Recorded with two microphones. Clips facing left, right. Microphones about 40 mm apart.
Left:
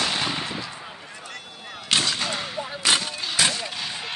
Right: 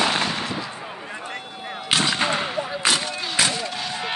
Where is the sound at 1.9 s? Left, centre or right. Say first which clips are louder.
Right 2 dB; centre.